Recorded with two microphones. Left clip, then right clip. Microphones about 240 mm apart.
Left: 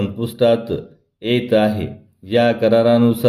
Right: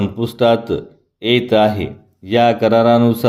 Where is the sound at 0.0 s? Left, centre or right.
Right.